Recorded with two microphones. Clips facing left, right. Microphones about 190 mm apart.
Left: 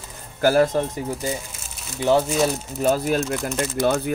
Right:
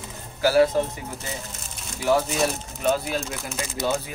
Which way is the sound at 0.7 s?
45° left (ahead or behind).